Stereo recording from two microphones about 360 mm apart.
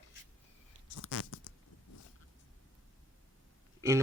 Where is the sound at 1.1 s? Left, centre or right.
Left.